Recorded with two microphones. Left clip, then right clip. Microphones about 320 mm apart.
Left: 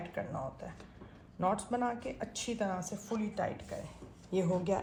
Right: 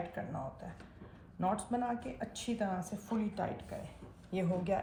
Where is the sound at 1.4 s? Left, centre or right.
Left.